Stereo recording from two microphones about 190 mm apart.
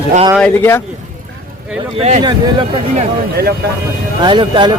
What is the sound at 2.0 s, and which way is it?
Speech, 35° right (ahead or behind).